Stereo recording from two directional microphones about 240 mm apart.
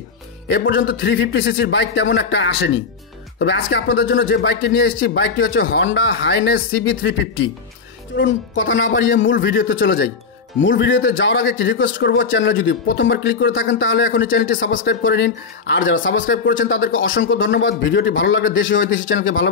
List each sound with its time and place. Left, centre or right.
0.5 s a man's voice: left